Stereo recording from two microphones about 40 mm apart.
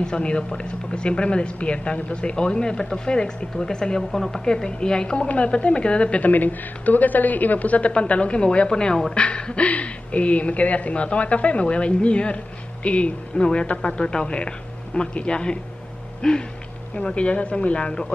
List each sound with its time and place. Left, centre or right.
0.0 s speech: left
6.3 s a woman's voice: left
16.2 s a sound: centre
16.9 s speech: left